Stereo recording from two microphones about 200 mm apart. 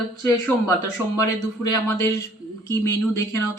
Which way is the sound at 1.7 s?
15° left (ahead or behind).